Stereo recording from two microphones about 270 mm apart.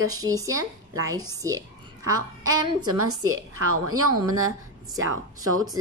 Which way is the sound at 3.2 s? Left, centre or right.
Right.